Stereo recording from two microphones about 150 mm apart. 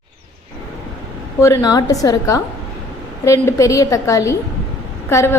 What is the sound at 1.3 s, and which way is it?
A woman's voice, 20° left (ahead or behind).